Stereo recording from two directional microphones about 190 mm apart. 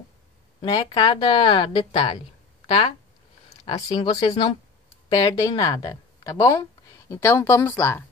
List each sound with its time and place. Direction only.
0.6 s speech: 25° left (ahead or behind)
5.2 s speech: 25° left (ahead or behind)